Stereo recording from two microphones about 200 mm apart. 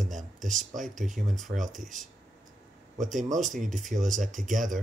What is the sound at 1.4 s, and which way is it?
Speech, 40° right (ahead or behind).